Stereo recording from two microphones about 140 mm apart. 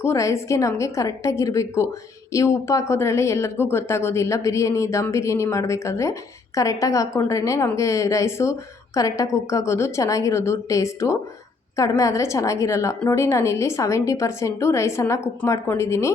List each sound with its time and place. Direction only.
0.0 s speech: 20° left (ahead or behind)